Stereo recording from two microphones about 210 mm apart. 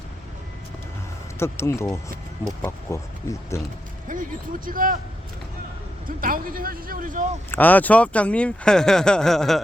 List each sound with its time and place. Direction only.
1.4 s speech: 10° left (ahead or behind)
4.1 s speech: 40° right (ahead or behind)
6.1 s speech: 40° right (ahead or behind)
7.5 s speech: 10° left (ahead or behind)